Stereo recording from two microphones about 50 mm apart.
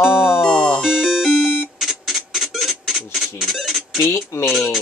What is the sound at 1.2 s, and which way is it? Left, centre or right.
Music, centre.